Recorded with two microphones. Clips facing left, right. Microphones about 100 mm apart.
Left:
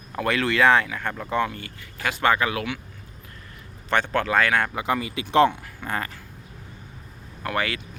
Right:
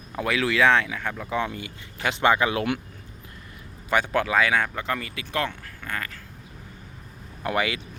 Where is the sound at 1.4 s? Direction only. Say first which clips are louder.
Left 3 dB; 15° right (ahead or behind).